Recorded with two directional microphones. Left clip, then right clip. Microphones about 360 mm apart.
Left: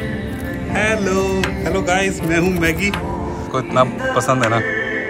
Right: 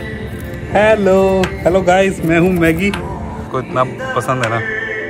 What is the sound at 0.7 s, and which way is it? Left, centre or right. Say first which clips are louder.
Speech: right 8 dB; centre.